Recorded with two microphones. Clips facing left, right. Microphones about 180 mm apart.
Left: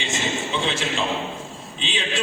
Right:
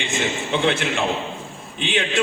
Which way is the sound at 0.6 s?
60° right (ahead or behind).